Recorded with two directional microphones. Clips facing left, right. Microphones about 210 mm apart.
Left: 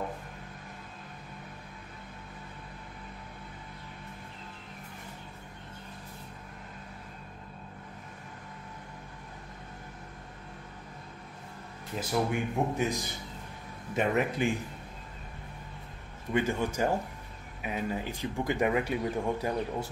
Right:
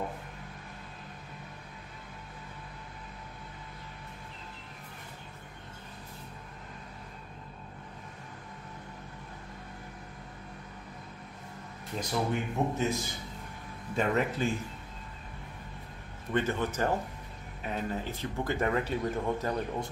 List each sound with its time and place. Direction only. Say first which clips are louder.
12.0 s speech: left 2 dB; 10° left (ahead or behind)
16.3 s speech: left 1 dB; 10° left (ahead or behind)